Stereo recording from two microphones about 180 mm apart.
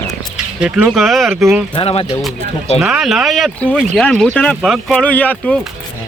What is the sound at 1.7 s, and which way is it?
Speech, 30° left (ahead or behind).